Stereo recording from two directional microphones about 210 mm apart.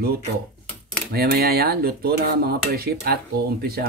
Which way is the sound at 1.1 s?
50° right (ahead or behind).